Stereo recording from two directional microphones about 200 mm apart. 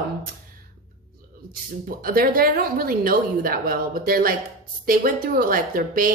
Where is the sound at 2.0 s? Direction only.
45° right (ahead or behind).